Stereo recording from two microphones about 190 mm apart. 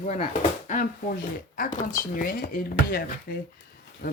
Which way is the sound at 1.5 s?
45° left (ahead or behind).